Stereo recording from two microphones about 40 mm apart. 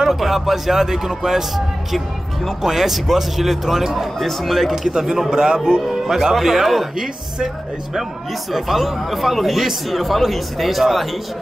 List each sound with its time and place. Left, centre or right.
0.0 s speech: centre
2.6 s speech: centre
5.3 s speech: centre
5.8 s speech: centre
8.5 s speech: centre